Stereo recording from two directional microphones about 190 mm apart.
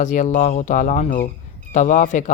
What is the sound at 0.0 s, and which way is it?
Speech, 40° left (ahead or behind).